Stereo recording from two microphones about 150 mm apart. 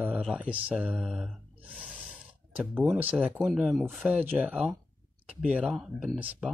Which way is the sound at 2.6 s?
5° right (ahead or behind).